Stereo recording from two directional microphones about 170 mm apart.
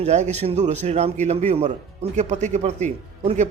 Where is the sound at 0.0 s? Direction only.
40° right (ahead or behind).